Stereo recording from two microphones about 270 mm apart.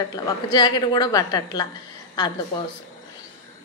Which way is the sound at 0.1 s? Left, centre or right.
Centre.